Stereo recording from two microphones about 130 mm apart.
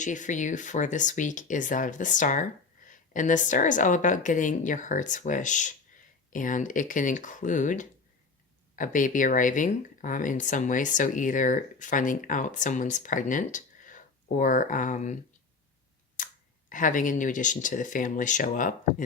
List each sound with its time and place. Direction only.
0.0 s a woman's voice: 70° left (ahead or behind)
6.3 s speech: 90° left
8.7 s speech: 90° left; by 15.2 s 70° left (ahead or behind)
16.1 s speech: 85° left